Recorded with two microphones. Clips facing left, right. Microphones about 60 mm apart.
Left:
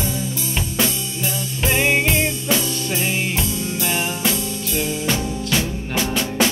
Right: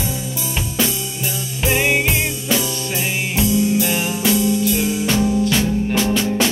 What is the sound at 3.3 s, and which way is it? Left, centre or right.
Music, centre.